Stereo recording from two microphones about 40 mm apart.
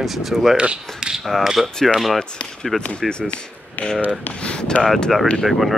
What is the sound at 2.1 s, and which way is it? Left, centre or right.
Speech, centre.